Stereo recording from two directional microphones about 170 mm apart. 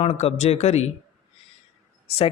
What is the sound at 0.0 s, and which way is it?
Speech, 40° left (ahead or behind).